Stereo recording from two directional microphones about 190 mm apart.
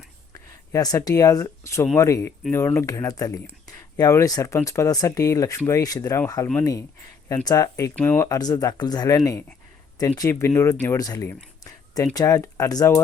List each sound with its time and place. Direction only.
0.3 s speech: 20° left (ahead or behind)